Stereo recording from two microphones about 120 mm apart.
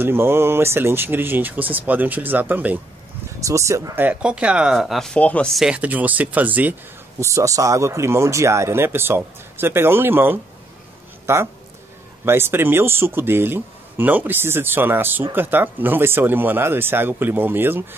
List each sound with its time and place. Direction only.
0.0 s speech: 20° right (ahead or behind)
3.3 s speech: 25° right (ahead or behind); by 5.5 s 10° left (ahead or behind)
5.5 s speech: centre (ahead or behind)
5.8 s speech: 15° right (ahead or behind)
7.2 s speech: 25° right (ahead or behind)